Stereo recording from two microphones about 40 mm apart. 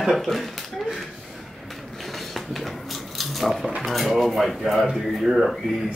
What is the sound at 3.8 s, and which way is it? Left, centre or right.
A man's voice, centre.